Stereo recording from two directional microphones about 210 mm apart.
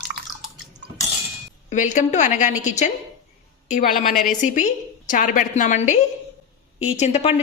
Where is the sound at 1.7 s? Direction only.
35° left (ahead or behind).